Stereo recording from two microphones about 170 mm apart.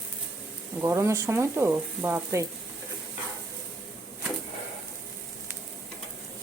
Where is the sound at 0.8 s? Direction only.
15° right (ahead or behind).